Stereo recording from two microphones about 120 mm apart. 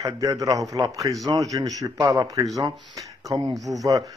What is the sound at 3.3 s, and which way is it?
Speech, 45° right (ahead or behind).